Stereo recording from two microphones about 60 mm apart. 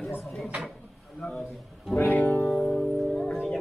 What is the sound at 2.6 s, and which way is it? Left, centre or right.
Music, centre.